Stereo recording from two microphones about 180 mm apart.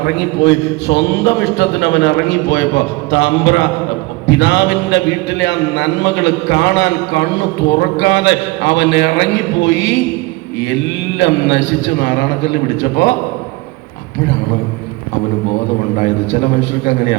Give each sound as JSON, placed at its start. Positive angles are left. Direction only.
{"t": 0.0, "sound": "a man's voice", "side_deg": 70}
{"t": 16.0, "sound": "a man's voice", "side_deg": 75}